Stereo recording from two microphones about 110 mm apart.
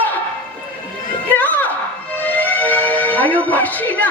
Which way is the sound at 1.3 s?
15° left (ahead or behind).